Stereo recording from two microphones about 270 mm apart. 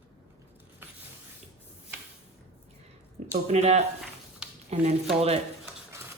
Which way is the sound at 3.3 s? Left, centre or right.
Right.